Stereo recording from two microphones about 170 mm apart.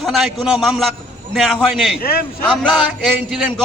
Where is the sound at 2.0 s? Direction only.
65° left (ahead or behind).